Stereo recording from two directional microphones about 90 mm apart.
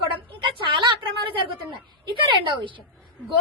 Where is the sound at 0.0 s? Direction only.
65° right (ahead or behind).